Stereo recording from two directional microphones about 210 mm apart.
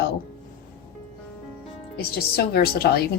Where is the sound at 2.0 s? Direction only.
50° left (ahead or behind).